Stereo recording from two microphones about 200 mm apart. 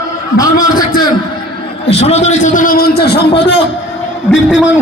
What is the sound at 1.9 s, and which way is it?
A man's voice, 30° left (ahead or behind).